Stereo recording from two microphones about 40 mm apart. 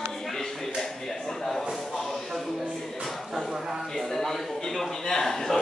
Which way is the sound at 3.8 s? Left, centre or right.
Centre.